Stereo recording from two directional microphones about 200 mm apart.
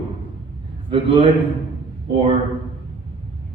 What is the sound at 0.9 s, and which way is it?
A man's voice, 25° right (ahead or behind).